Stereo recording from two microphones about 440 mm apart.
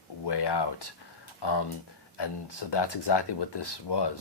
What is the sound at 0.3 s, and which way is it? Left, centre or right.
Speech, left.